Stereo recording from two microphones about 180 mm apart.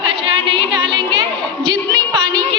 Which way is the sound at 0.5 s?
25° right (ahead or behind).